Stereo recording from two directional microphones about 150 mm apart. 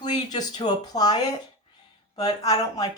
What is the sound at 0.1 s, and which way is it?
Speech, 30° left (ahead or behind).